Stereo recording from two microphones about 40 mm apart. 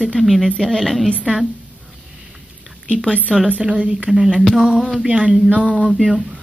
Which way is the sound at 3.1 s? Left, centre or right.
Left.